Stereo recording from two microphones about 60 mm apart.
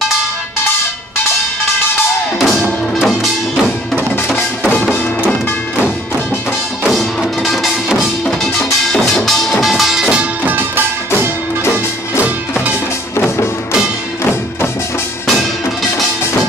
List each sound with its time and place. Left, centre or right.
2.3 s music: centre
4.4 s music: left
6.9 s music: centre
11.1 s music: left